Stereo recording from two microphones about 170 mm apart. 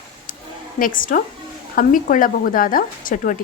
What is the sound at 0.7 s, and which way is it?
Speech, 55° left (ahead or behind).